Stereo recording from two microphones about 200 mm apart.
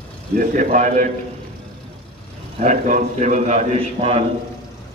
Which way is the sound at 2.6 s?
40° right (ahead or behind).